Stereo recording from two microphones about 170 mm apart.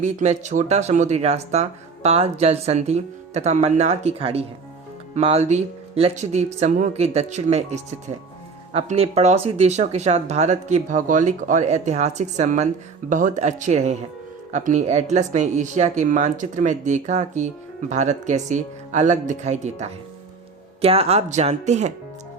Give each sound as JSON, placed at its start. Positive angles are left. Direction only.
{"t": 0.0, "sound": "speech", "side_deg": -45}